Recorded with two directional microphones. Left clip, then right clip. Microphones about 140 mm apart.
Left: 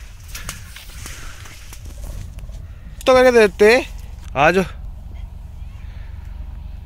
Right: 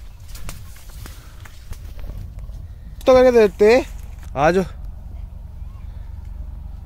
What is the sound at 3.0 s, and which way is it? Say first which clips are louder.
Speech: even; 5° right (ahead or behind).